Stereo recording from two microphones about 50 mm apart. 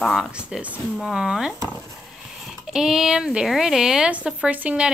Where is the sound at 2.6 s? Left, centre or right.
Centre.